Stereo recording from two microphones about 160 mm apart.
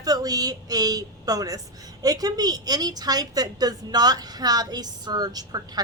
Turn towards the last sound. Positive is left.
turn(degrees=-25)  # may be behind; listen again after turning